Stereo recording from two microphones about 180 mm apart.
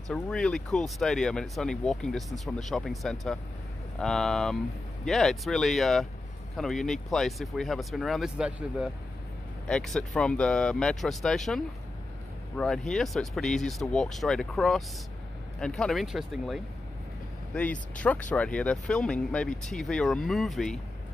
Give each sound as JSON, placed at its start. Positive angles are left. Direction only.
{"t": 0.1, "sound": "speech", "side_deg": 5}